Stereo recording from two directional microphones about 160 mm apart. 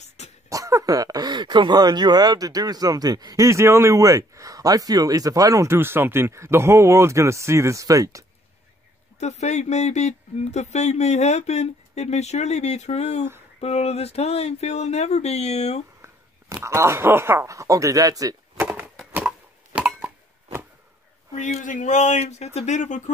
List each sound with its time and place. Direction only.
0.5 s speech: 20° right (ahead or behind)
9.2 s speech: 45° left (ahead or behind)
16.6 s speech: 15° right (ahead or behind)
19.1 s a sound: 10° right (ahead or behind)
21.3 s speech: 45° left (ahead or behind)